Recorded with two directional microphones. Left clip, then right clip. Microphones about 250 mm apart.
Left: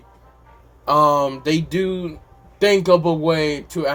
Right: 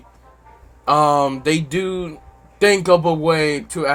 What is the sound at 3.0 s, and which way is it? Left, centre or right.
Speech, right.